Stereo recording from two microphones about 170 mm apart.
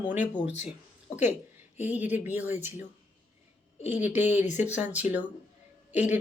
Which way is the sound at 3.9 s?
10° right (ahead or behind).